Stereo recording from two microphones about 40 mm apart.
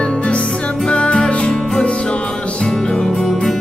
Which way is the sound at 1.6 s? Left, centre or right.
Centre.